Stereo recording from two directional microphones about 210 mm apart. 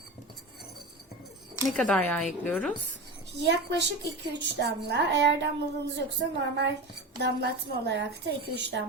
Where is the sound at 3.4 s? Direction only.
55° right (ahead or behind).